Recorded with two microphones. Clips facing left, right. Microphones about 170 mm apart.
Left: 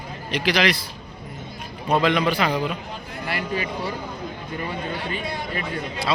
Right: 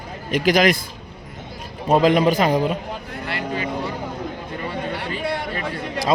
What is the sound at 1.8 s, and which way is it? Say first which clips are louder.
Speech: right 5 dB; 40° right (ahead or behind).